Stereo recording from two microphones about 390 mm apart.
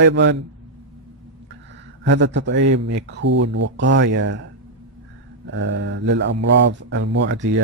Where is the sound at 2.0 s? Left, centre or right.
Right.